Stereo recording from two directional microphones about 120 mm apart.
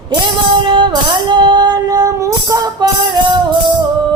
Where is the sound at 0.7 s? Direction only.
40° right (ahead or behind).